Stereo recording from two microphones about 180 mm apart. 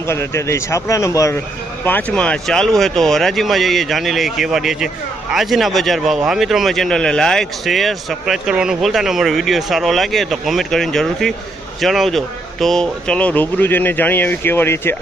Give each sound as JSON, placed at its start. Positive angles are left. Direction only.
{"t": 0.1, "sound": "speech", "side_deg": 15}